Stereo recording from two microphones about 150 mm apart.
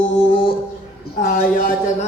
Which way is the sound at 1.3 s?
85° left.